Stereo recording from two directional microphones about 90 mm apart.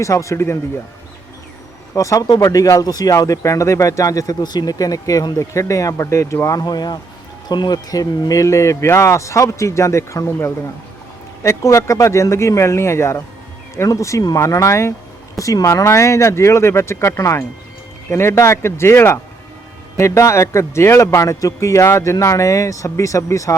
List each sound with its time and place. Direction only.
0.0 s speech: 35° left (ahead or behind)
2.0 s speech: 40° left (ahead or behind)
6.6 s speech: 50° left (ahead or behind); by 10.3 s 35° left (ahead or behind)
11.4 s speech: 35° left (ahead or behind)